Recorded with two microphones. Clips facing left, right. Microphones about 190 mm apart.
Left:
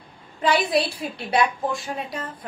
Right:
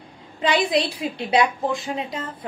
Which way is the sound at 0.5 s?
20° right (ahead or behind).